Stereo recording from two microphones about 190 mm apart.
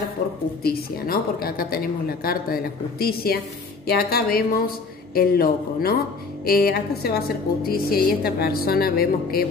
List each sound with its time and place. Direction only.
0.7 s a woman's voice: 50° left (ahead or behind)